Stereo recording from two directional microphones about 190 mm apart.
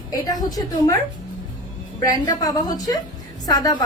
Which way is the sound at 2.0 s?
20° left (ahead or behind).